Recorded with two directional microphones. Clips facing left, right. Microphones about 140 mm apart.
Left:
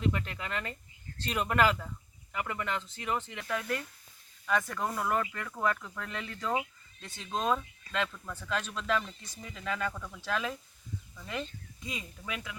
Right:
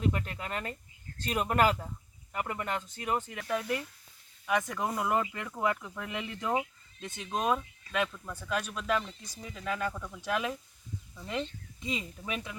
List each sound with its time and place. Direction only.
0.1 s speech: 40° right (ahead or behind)
3.4 s speech: 15° right (ahead or behind)